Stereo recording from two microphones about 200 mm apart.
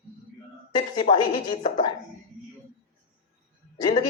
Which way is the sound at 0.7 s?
20° left (ahead or behind).